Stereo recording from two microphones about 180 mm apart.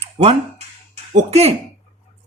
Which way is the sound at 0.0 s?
35° right (ahead or behind).